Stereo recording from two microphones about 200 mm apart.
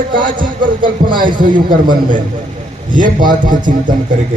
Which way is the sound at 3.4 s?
40° right (ahead or behind).